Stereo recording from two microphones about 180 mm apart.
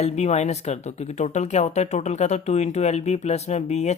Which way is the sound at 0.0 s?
40° left (ahead or behind).